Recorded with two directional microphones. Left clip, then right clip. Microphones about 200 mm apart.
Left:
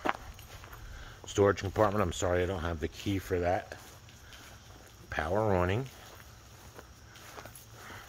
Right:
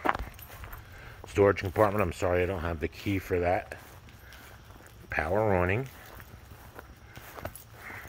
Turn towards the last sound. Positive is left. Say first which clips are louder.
# right 7 dB
turn(degrees=-65)  # may be behind; listen again after turning